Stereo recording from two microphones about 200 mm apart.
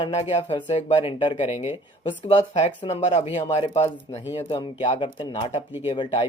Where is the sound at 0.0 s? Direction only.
30° left (ahead or behind).